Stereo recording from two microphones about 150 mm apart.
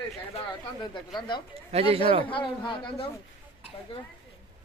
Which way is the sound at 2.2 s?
35° left (ahead or behind).